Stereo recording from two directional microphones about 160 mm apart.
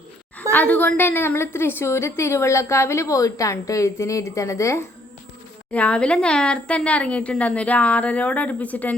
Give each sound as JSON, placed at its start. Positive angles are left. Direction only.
{"t": 0.5, "sound": "a woman's voice", "side_deg": 10}
{"t": 5.7, "sound": "a woman's voice", "side_deg": 10}